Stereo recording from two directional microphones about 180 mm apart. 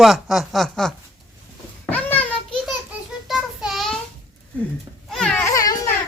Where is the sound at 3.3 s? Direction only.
Centre (ahead or behind).